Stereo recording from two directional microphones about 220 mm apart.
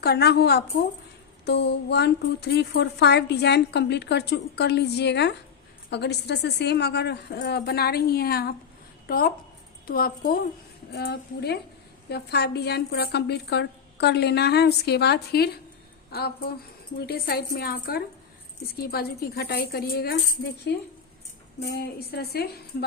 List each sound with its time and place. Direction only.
0.0 s a woman's voice: 45° left (ahead or behind)